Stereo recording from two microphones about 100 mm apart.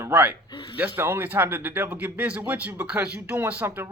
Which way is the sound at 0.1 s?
15° right (ahead or behind).